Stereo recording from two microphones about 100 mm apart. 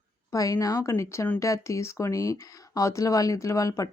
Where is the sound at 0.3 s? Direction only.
35° left (ahead or behind).